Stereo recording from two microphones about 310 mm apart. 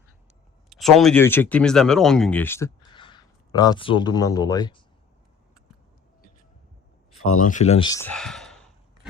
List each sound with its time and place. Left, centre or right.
0.7 s speech: centre
7.2 s speech: left
7.4 s speech: left; by 8.7 s centre